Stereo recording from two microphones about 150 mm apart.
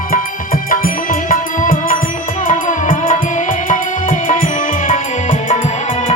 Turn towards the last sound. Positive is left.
turn(degrees=60)  # may be behind; listen again after turning